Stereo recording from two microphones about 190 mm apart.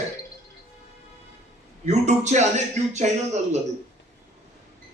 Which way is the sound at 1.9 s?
35° right (ahead or behind).